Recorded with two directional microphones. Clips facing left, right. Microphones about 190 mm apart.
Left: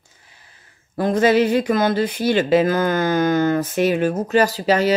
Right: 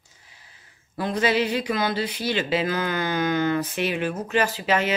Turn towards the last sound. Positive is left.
turn(degrees=35)  # may be behind; listen again after turning